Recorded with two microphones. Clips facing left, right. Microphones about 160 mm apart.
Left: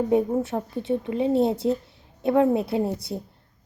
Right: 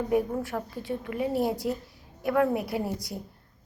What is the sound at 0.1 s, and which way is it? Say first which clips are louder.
A woman's voice: left 5 dB; 25° left (ahead or behind).